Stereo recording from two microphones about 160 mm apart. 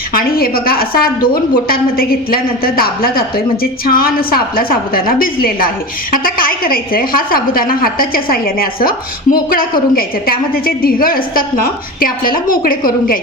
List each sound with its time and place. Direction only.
0.1 s a woman's voice: 65° left (ahead or behind)